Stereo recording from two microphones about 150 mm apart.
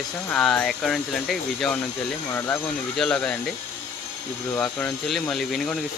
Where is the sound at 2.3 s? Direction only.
15° left (ahead or behind).